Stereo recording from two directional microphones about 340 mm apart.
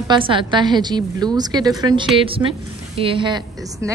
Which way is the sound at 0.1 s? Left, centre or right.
Centre.